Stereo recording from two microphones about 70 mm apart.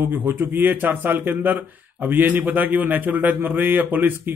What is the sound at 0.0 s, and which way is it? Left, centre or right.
A man's voice, right.